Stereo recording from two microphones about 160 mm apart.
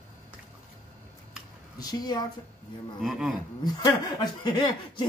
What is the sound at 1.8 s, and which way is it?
Speech, 25° left (ahead or behind).